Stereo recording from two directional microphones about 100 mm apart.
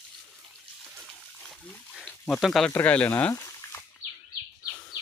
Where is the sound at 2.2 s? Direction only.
Centre (ahead or behind).